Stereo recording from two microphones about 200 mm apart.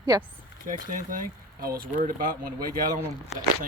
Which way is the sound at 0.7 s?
40° right (ahead or behind).